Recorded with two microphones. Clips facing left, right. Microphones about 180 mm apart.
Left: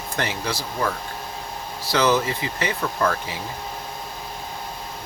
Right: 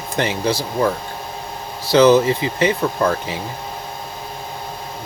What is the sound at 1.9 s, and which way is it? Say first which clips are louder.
Speech: right 9 dB; 25° right (ahead or behind).